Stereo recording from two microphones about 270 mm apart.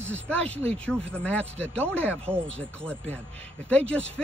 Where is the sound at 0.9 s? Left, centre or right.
Centre.